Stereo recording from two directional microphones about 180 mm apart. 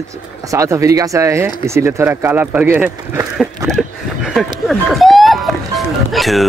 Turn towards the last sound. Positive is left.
turn(degrees=0)  # may be behind; listen again after turning